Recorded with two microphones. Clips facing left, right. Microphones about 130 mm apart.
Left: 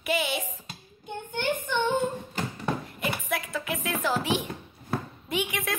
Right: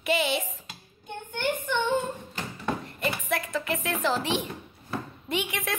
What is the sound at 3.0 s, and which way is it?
Music, centre (ahead or behind).